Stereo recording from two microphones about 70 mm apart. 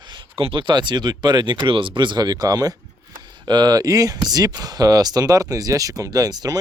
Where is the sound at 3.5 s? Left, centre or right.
Right.